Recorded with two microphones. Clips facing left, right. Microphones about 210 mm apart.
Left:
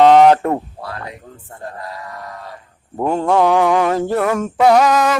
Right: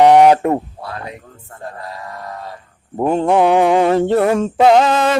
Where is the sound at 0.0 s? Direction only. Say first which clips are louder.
Even; 15° right (ahead or behind).